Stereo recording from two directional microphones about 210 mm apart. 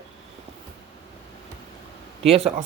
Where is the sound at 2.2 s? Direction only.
30° right (ahead or behind).